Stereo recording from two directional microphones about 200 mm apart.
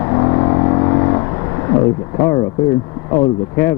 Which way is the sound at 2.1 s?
20° left (ahead or behind).